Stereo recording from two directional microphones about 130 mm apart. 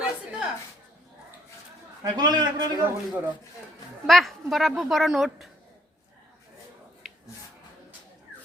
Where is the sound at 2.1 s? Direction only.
35° right (ahead or behind).